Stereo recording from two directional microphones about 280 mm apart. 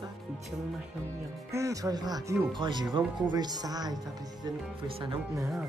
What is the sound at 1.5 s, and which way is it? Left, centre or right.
Speech, centre.